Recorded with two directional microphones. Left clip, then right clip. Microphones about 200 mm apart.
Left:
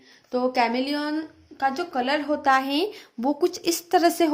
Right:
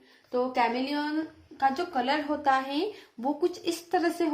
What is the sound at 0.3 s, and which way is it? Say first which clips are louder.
Speech: left 4 dB; 45° left (ahead or behind).